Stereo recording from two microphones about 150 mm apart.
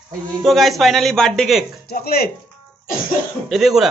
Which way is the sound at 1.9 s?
90° left.